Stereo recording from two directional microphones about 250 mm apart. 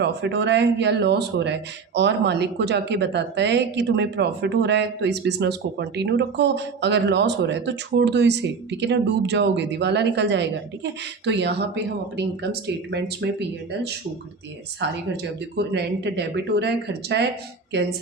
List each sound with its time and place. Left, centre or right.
0.0 s speech: right
14.8 s speech: right